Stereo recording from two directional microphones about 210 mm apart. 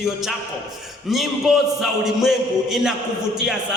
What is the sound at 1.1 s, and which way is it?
A man's voice, centre (ahead or behind).